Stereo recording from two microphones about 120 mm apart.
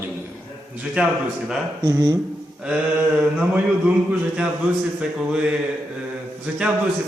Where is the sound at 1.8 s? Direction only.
30° right (ahead or behind).